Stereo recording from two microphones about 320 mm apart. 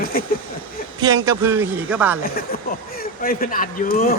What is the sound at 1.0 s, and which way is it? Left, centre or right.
A man's voice, centre.